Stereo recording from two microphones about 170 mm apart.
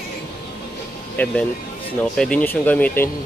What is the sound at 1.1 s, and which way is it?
Speech, 5° left (ahead or behind).